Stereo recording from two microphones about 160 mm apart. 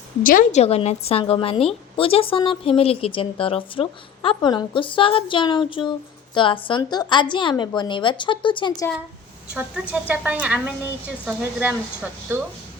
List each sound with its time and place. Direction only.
0.2 s a woman's voice: 60° left (ahead or behind)
0.6 s a woman's voice: 40° left (ahead or behind)
9.6 s a woman's voice: 10° right (ahead or behind)